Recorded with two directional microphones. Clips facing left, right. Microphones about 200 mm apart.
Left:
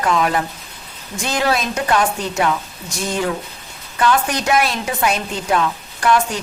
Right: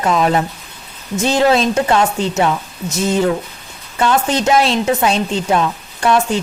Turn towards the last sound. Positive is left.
turn(degrees=-25)  # may be behind; listen again after turning